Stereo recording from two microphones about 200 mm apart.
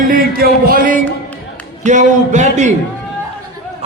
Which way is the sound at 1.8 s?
40° right (ahead or behind).